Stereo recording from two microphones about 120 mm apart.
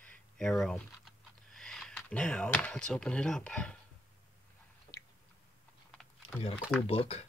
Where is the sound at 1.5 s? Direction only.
5° left (ahead or behind).